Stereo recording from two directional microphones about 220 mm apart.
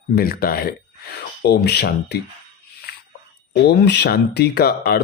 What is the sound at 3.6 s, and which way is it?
Speech, 50° left (ahead or behind).